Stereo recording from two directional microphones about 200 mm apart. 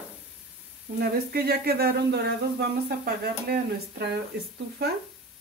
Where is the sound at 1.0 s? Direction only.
50° right (ahead or behind).